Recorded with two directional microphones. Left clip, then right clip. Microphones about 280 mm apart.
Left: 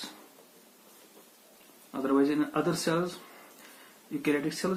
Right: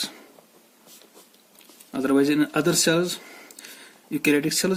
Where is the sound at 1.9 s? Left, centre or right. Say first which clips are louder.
Right 6 dB; right.